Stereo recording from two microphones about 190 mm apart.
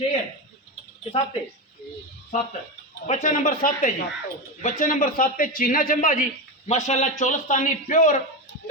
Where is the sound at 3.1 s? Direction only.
40° left (ahead or behind).